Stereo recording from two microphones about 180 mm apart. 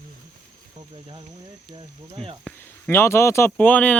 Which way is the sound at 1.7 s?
25° right (ahead or behind).